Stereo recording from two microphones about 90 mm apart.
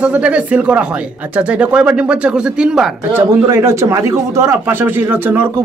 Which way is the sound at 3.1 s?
25° right (ahead or behind).